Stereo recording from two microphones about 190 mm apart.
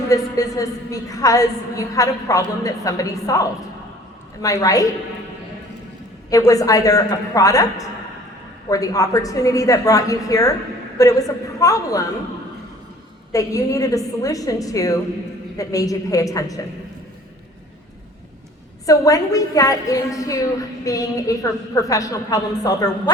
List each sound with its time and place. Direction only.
0.1 s a woman's voice: 20° left (ahead or behind)
6.3 s a woman's voice: 15° left (ahead or behind)
13.3 s a woman's voice: 15° left (ahead or behind)
18.9 s a woman's voice: 20° left (ahead or behind)